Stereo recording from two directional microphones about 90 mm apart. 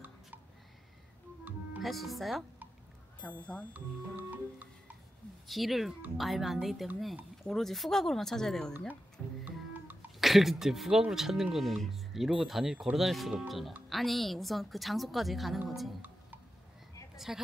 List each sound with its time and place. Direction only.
1.5 s music: 20° right (ahead or behind)
1.8 s speech: centre (ahead or behind)
3.2 s speech: 15° left (ahead or behind)
3.7 s music: 20° right (ahead or behind)
5.5 s speech: centre (ahead or behind)
9.4 s music: 20° right (ahead or behind)
10.2 s speech: centre (ahead or behind)
17.3 s speech: 5° right (ahead or behind)